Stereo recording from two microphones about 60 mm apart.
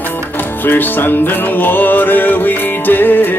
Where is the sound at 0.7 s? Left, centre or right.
Left.